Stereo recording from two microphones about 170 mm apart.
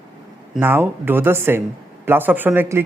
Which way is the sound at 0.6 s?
10° right (ahead or behind).